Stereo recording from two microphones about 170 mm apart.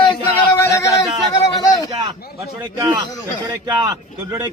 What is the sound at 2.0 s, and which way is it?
A man's voice, 25° right (ahead or behind).